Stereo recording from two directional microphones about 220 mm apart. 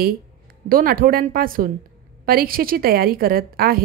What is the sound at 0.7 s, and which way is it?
A woman's voice, 40° right (ahead or behind).